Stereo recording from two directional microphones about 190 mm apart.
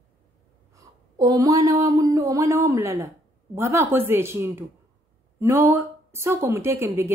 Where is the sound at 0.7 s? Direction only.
20° right (ahead or behind).